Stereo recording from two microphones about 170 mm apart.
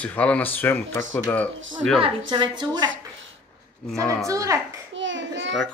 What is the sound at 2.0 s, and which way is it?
Speech, 25° right (ahead or behind).